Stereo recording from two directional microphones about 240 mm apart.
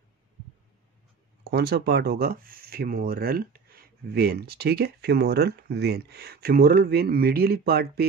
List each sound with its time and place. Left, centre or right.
1.5 s speech: right